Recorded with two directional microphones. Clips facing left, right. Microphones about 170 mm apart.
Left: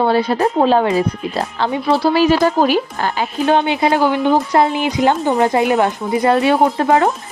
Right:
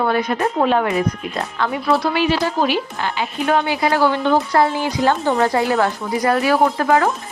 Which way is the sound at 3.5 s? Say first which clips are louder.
Left 3 dB; 25° left (ahead or behind).